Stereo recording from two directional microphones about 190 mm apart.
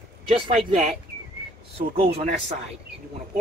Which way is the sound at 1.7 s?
30° right (ahead or behind).